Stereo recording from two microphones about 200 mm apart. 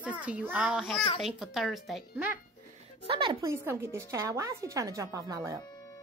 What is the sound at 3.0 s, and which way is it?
A woman's voice, 25° right (ahead or behind).